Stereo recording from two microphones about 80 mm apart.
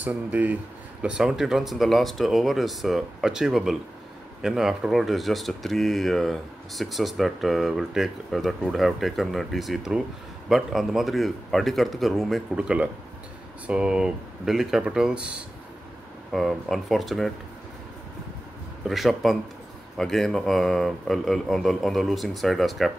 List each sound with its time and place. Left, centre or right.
0.0 s speech: centre
1.0 s speech: centre
12.5 s speech: centre
16.3 s speech: centre
18.9 s speech: centre